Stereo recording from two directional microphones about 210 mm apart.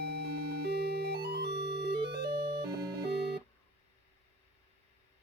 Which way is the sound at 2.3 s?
25° right (ahead or behind).